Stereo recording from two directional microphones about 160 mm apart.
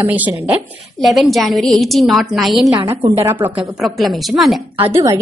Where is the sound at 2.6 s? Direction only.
20° right (ahead or behind).